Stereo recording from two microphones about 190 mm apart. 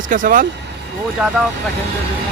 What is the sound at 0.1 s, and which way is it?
Speech, 45° right (ahead or behind).